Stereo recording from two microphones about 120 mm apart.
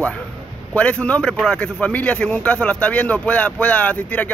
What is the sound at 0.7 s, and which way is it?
Speech, 10° left (ahead or behind).